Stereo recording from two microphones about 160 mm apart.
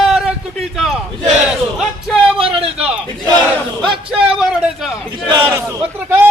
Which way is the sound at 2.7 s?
5° right (ahead or behind).